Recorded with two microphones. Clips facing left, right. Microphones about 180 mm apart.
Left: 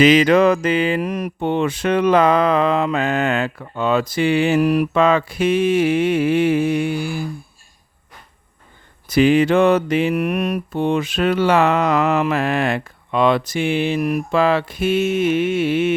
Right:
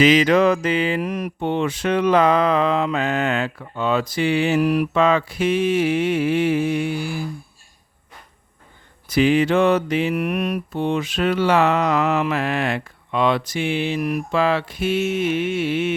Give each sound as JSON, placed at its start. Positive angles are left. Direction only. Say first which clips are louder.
{"t": 0.0, "sound": "speech", "louder": "left 2 dB", "side_deg": 50}
{"t": 9.0, "sound": "speech", "louder": "left 3 dB", "side_deg": 50}